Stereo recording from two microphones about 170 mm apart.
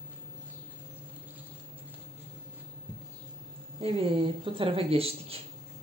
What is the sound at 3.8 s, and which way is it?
Speech, 35° right (ahead or behind).